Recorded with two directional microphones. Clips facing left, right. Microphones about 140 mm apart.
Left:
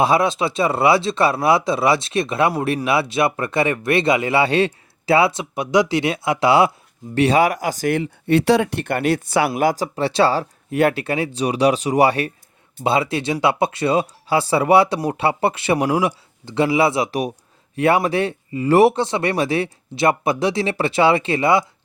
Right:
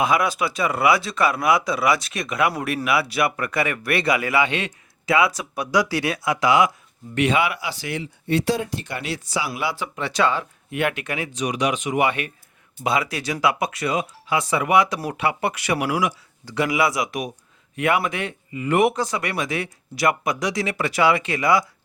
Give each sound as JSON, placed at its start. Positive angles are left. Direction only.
{"t": 0.0, "sound": "speech", "side_deg": 30}
{"t": 9.6, "sound": "speech", "side_deg": 45}